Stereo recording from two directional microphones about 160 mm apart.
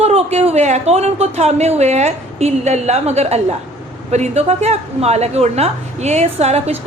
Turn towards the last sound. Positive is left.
turn(degrees=-40)  # may be behind; listen again after turning